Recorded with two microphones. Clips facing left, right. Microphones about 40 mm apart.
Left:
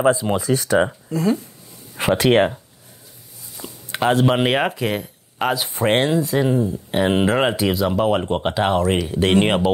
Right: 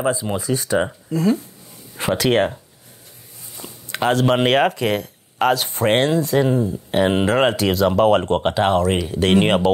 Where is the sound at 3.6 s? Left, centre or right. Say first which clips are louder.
Left 2 dB; right.